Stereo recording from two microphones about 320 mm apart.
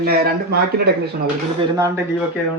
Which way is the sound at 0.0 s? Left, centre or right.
Right.